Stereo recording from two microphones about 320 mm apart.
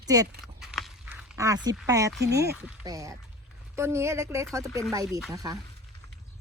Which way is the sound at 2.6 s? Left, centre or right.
Centre.